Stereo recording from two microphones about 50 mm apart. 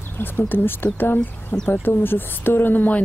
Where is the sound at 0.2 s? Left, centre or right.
Left.